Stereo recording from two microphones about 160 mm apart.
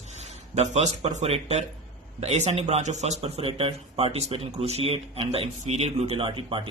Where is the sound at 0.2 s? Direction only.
45° right (ahead or behind).